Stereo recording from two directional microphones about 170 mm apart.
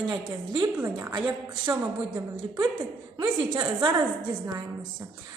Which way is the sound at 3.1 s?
25° right (ahead or behind).